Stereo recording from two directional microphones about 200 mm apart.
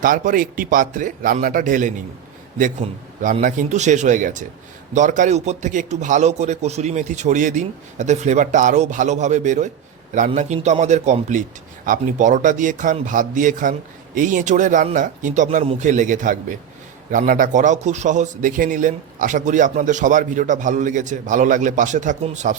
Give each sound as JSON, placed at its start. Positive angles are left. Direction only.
{"t": 0.0, "sound": "speech", "side_deg": -45}
{"t": 3.4, "sound": "a man's voice", "side_deg": -35}